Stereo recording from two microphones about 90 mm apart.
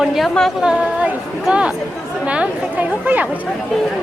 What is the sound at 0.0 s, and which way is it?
A woman's voice, 5° right (ahead or behind).